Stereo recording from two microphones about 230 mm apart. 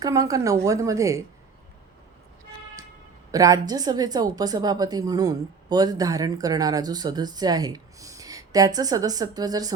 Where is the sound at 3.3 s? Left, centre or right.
Centre.